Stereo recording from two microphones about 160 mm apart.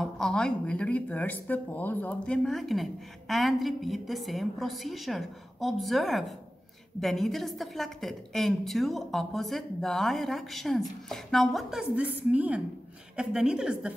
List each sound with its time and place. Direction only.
0.0 s speech: 5° left (ahead or behind)